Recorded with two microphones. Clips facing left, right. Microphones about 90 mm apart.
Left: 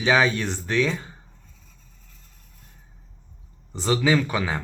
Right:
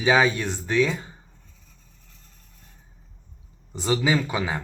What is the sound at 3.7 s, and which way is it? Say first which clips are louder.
Speech: left 2 dB; 15° right (ahead or behind).